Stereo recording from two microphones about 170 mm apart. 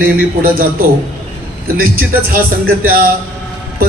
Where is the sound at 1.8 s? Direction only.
60° right (ahead or behind).